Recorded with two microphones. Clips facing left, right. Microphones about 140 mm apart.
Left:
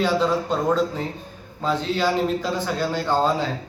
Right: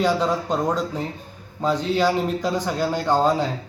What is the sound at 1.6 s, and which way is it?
A man's voice, 15° right (ahead or behind).